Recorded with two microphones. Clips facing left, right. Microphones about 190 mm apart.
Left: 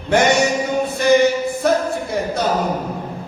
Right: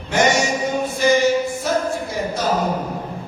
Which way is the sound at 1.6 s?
60° left (ahead or behind).